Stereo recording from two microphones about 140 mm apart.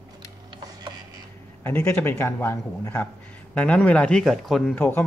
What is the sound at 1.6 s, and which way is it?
Speech, 15° left (ahead or behind).